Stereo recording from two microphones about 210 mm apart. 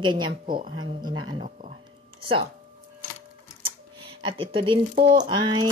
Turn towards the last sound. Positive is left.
turn(degrees=-20)  # may be behind; listen again after turning